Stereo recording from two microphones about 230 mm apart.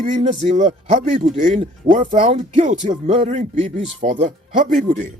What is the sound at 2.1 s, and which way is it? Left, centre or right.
A man's voice, right.